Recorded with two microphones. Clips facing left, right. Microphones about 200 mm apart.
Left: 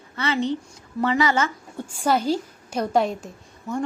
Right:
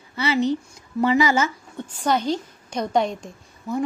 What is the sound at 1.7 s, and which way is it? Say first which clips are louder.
A woman's voice: left 1 dB; 10° left (ahead or behind).